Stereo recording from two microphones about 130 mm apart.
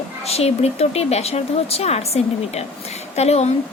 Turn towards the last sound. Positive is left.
turn(degrees=55)  # may be behind; listen again after turning